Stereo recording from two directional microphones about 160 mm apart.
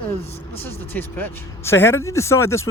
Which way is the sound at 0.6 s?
15° left (ahead or behind).